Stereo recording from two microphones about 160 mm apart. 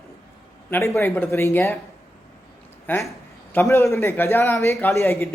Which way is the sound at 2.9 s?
10° left (ahead or behind).